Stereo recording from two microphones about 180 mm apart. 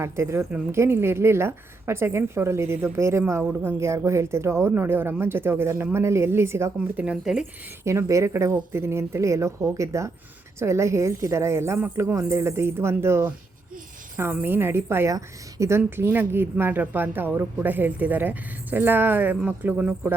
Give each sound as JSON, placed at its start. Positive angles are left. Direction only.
{"t": 0.0, "sound": "a woman's voice", "side_deg": -15}
{"t": 7.9, "sound": "a woman's voice", "side_deg": -15}